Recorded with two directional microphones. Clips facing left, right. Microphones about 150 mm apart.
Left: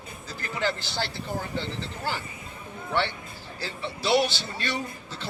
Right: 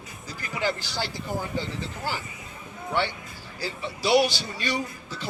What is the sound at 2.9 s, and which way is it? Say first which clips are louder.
A man's voice: even; 10° right (ahead or behind).